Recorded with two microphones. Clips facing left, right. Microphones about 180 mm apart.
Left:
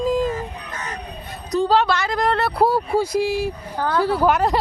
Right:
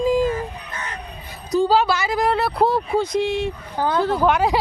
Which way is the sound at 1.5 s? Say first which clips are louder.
Right 1 dB; centre (ahead or behind).